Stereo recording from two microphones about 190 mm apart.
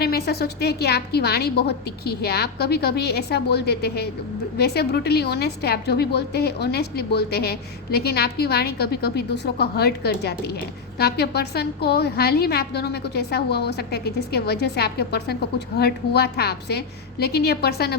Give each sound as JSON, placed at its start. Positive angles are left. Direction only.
{"t": 0.0, "sound": "a woman's voice", "side_deg": 55}